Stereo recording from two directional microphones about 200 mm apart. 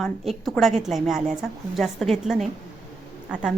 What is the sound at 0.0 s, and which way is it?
A woman's voice, centre (ahead or behind).